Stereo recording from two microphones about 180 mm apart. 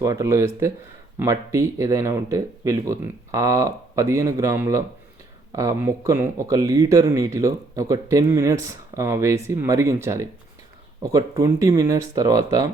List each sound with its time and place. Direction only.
0.0 s speech: 15° right (ahead or behind)